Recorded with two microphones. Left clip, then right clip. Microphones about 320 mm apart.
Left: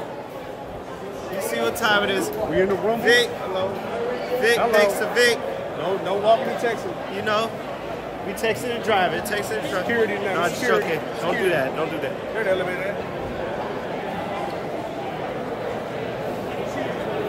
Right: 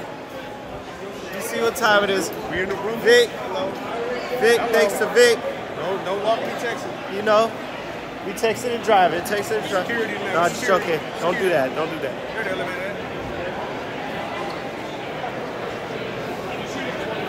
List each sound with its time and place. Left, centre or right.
1.5 s speech: centre
4.4 s speech: centre
6.0 s speech: centre
7.2 s speech: centre